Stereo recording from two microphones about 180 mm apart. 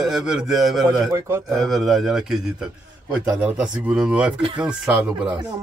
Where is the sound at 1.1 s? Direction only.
15° right (ahead or behind).